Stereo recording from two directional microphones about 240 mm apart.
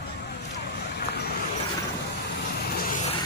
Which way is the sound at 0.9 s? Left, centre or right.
Left.